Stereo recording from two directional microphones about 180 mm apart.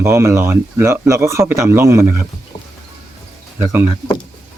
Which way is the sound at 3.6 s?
15° right (ahead or behind).